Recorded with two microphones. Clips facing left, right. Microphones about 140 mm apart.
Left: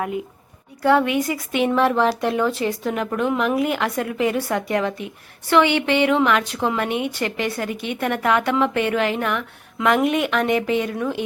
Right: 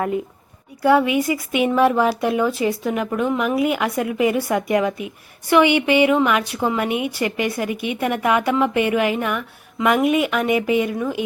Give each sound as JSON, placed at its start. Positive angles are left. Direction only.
{"t": 0.8, "sound": "a woman's voice", "side_deg": -10}